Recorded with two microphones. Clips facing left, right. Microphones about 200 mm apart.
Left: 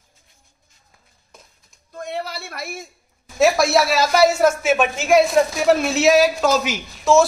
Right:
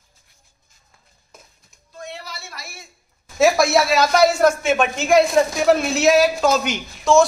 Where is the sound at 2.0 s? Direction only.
55° left (ahead or behind).